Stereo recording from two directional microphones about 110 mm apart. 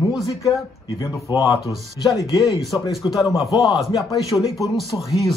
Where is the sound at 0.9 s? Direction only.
30° left (ahead or behind).